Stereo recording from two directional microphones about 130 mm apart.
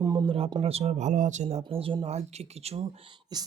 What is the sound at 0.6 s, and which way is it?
Speech, 50° right (ahead or behind).